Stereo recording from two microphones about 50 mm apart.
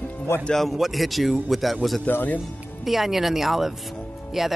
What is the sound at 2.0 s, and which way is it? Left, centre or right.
Speech, left.